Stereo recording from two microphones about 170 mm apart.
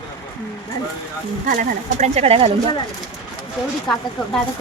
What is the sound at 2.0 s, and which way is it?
Speech, 40° right (ahead or behind).